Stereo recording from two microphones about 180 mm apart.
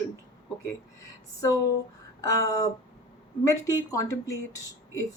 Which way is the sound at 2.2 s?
20° left (ahead or behind).